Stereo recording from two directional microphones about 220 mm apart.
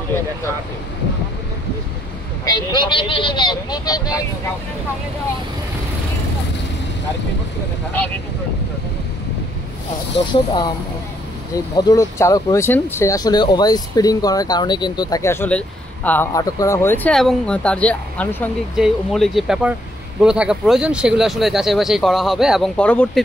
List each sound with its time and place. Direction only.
2.4 s a man's voice: 20° left (ahead or behind)
11.5 s speech: 15° left (ahead or behind)